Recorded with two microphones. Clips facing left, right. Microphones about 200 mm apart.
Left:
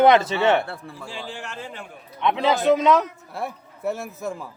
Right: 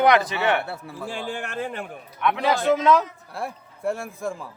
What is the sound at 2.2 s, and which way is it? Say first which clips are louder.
Speech: left 1 dB; 20° left (ahead or behind).